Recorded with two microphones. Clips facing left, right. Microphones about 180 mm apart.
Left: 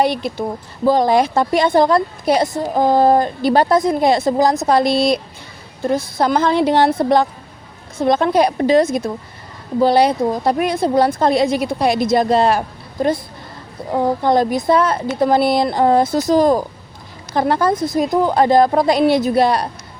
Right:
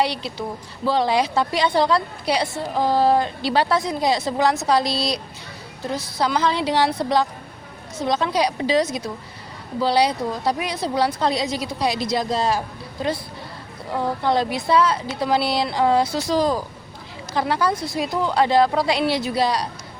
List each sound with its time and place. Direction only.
0.0 s a woman's voice: 50° left (ahead or behind)